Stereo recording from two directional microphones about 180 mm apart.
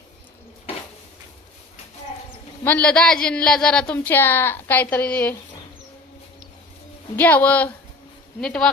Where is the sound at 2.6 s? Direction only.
5° left (ahead or behind).